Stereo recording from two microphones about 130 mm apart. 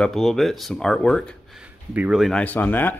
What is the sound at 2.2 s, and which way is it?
Speech, 10° left (ahead or behind).